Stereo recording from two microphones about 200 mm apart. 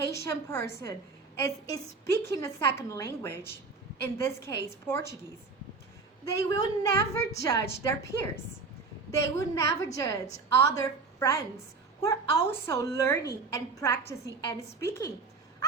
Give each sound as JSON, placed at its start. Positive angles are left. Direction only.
{"t": 0.1, "sound": "a woman's voice", "side_deg": 15}
{"t": 6.3, "sound": "a woman's voice", "side_deg": 15}
{"t": 9.3, "sound": "a woman's voice", "side_deg": 15}